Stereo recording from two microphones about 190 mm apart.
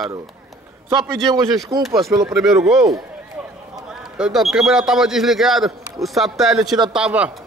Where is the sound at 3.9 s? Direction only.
5° right (ahead or behind).